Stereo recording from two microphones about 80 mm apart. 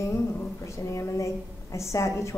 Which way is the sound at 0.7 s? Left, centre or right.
Left.